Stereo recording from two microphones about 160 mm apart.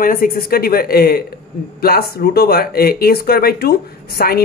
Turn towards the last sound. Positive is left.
turn(degrees=70)  # may be behind; listen again after turning